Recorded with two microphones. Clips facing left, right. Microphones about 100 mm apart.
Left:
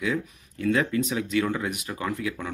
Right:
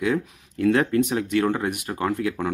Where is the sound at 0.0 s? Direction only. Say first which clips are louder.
Right 4 dB; 60° right (ahead or behind).